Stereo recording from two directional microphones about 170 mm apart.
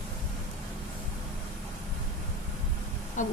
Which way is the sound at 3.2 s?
45° left (ahead or behind).